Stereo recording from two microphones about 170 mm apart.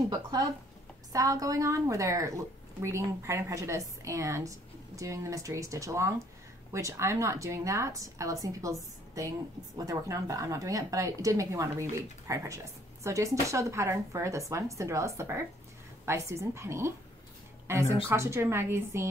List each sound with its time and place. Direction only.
1.1 s a woman's voice: 20° right (ahead or behind)
18.1 s speech: 15° right (ahead or behind)